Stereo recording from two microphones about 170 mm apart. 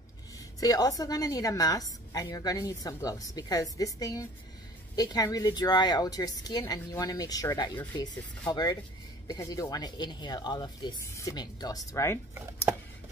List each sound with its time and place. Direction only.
0.6 s a woman's voice: 20° left (ahead or behind)